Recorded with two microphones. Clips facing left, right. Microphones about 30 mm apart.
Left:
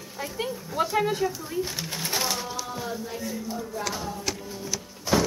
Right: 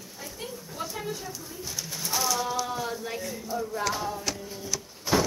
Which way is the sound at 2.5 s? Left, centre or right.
Centre.